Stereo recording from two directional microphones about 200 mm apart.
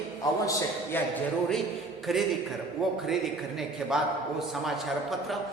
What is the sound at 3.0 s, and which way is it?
Speech, centre (ahead or behind).